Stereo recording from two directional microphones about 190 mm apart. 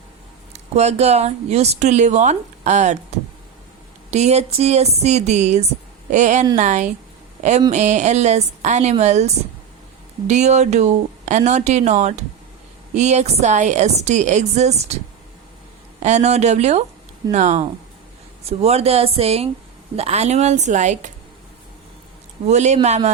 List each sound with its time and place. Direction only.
0.5 s a woman's voice: 35° right (ahead or behind)
16.0 s a woman's voice: 35° right (ahead or behind)
22.4 s a woman's voice: 35° right (ahead or behind)